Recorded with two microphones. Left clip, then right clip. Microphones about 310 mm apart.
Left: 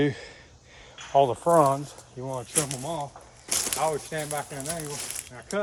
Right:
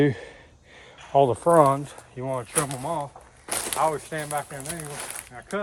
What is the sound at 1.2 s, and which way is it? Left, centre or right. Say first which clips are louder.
Speech: right 5 dB; right.